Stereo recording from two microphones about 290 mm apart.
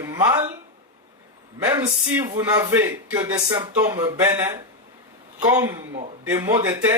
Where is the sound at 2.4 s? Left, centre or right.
Centre.